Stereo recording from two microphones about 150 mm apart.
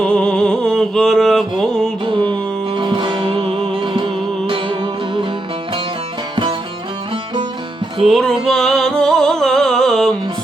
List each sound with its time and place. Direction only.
0.0 s music: 5° left (ahead or behind)
2.0 s music: 35° right (ahead or behind)
8.0 s music: centre (ahead or behind)